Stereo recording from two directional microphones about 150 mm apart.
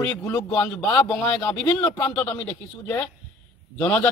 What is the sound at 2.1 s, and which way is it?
A man's voice, 10° left (ahead or behind).